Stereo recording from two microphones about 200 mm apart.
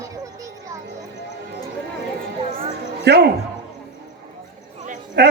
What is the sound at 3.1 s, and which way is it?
Speech, 55° right (ahead or behind).